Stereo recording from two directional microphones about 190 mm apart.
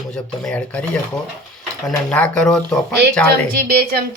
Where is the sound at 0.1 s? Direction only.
5° left (ahead or behind).